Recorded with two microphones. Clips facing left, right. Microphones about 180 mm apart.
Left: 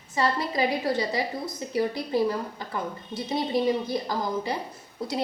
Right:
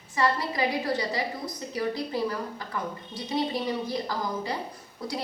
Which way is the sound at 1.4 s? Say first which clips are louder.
Left 3 dB; 25° left (ahead or behind).